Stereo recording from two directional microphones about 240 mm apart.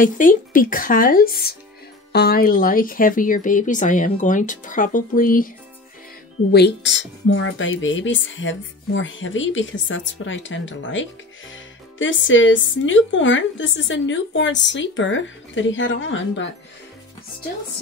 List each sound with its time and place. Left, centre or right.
0.0 s speech: left
6.5 s speech: left